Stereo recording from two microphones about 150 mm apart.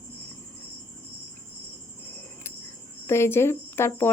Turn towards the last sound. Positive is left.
turn(degrees=15)  # may be behind; listen again after turning